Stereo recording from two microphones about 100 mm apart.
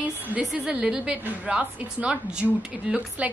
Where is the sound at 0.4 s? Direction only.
5° right (ahead or behind).